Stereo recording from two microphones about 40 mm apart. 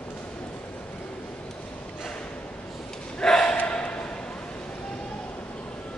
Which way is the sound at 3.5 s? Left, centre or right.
Left.